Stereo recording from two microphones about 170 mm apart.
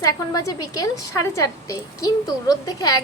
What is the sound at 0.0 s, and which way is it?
A woman's voice, 20° left (ahead or behind).